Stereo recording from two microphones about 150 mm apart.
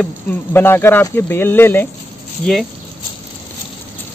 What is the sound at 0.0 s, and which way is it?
Speech, 10° left (ahead or behind).